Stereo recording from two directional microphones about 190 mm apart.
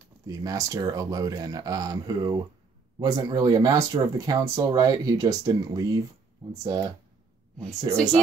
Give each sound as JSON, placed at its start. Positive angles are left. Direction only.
{"t": 0.3, "sound": "speech", "side_deg": -20}